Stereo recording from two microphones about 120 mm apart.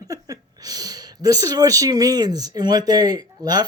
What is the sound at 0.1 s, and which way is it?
Speech, 30° right (ahead or behind).